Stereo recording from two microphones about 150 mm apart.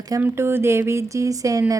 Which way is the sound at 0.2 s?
15° right (ahead or behind).